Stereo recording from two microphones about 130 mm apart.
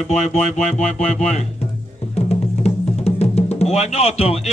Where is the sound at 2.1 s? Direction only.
55° left (ahead or behind).